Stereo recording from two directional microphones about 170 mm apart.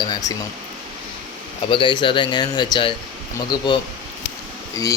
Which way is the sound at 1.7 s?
30° left (ahead or behind).